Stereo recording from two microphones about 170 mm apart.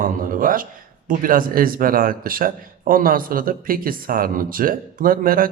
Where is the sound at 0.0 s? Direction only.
55° right (ahead or behind).